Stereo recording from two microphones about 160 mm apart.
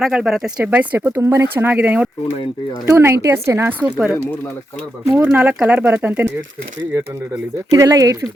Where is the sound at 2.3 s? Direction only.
35° left (ahead or behind).